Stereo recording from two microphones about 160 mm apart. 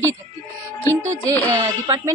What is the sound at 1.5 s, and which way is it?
Speech, 20° right (ahead or behind).